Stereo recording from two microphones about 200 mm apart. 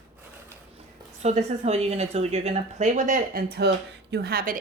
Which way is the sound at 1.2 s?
35° right (ahead or behind).